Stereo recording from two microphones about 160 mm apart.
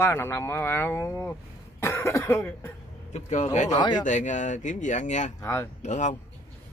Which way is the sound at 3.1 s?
50° left (ahead or behind).